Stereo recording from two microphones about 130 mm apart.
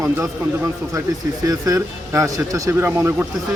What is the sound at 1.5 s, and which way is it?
Speech, 25° right (ahead or behind).